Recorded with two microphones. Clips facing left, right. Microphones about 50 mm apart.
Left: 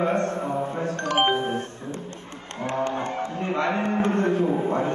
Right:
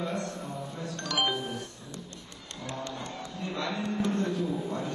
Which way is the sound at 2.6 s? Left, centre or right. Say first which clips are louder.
Left 11 dB; left.